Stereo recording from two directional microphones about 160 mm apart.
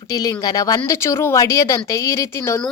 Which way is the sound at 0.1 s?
20° left (ahead or behind).